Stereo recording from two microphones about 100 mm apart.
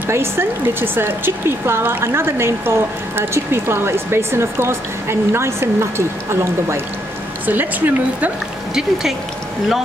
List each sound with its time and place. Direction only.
0.0 s speech: 25° right (ahead or behind)
8.7 s speech: 5° right (ahead or behind)